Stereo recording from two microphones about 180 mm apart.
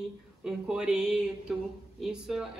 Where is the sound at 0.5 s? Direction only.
5° right (ahead or behind).